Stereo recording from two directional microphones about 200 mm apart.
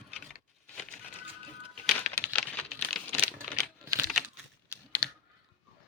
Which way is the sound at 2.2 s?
5° left (ahead or behind).